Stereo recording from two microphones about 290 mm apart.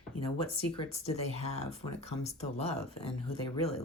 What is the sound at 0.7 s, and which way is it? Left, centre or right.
Speech, left.